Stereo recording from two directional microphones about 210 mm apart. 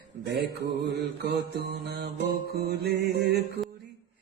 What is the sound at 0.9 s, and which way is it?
Mantra, 55° right (ahead or behind).